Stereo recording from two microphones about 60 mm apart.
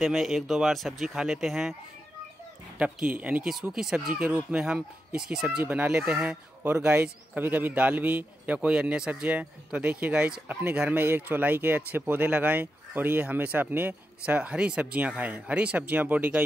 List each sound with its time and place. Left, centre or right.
0.0 s speech: centre
2.8 s speech: right
3.7 s speech: centre
4.3 s speech: right
5.1 s speech: centre
5.6 s a man's voice: right
7.0 s a man's voice: right